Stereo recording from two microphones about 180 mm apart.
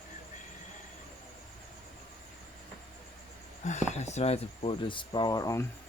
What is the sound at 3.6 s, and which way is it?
Speech, 40° left (ahead or behind).